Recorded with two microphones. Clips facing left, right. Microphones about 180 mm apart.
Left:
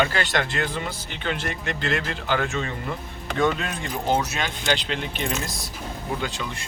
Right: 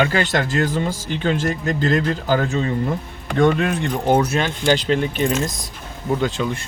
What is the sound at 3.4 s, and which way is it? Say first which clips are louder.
Speech: right 7 dB; 55° right (ahead or behind).